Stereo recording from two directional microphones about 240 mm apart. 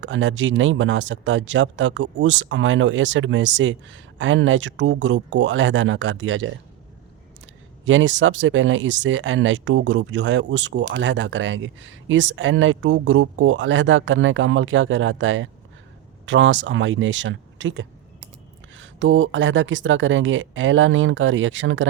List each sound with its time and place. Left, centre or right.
0.0 s speech: right